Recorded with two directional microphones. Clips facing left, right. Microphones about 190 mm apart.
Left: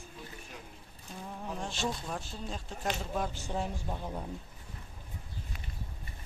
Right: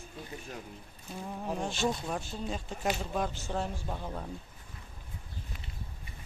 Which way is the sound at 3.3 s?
10° left (ahead or behind).